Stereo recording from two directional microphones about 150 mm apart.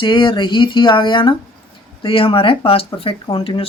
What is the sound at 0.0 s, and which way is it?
Speech, 30° left (ahead or behind).